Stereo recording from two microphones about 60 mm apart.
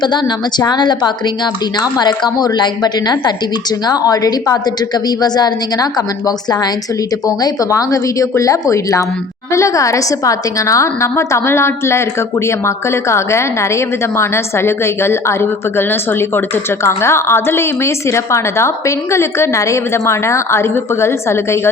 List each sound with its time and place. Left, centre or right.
4.0 s a woman's voice: left
5.7 s a woman's voice: left
16.8 s a woman's voice: left